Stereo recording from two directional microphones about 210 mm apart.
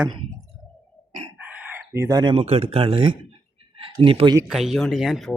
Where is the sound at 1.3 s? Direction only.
10° right (ahead or behind); by 4.3 s 25° right (ahead or behind).